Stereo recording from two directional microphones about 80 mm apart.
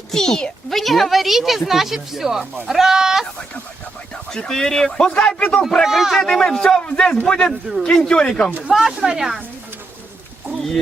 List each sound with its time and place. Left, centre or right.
0.1 s speech: centre
4.1 s speech: centre
5.8 s speech: centre
8.7 s speech: centre